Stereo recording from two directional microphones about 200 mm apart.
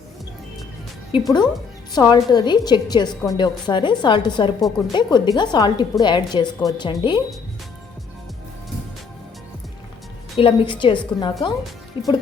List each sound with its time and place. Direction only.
1.1 s a woman's voice: 25° left (ahead or behind)
10.3 s a woman's voice: 25° left (ahead or behind)